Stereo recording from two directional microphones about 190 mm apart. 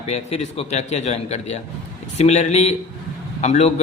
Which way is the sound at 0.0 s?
35° left (ahead or behind).